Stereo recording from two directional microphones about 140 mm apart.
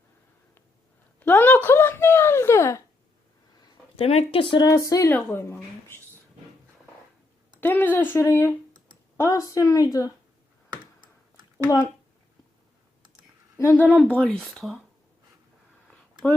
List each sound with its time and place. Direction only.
1.2 s speech: 15° left (ahead or behind)
3.9 s speech: 45° left (ahead or behind)
4.7 s speech: 25° left (ahead or behind)
7.6 s a woman's voice: 10° left (ahead or behind)
13.6 s speech: 15° left (ahead or behind)